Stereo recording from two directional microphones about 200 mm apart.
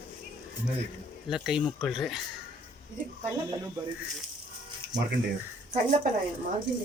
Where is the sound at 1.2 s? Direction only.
Centre (ahead or behind).